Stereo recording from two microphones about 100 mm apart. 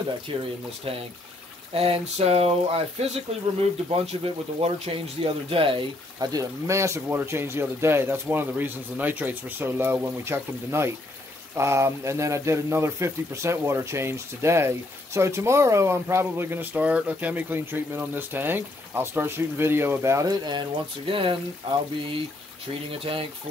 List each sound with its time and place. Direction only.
0.3 s speech: 65° right (ahead or behind)
1.7 s speech: 75° right (ahead or behind); by 3.4 s 90° right
4.0 s speech: 80° right; by 5.9 s 65° right (ahead or behind)
6.1 s speech: 35° right (ahead or behind)
21.1 s speech: 60° right (ahead or behind)
22.8 s speech: 65° right (ahead or behind)